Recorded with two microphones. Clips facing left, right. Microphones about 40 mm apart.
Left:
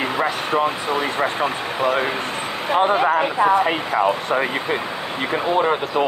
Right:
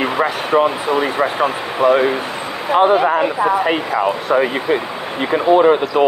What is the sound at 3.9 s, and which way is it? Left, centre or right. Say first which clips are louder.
Speech: left 1 dB; centre.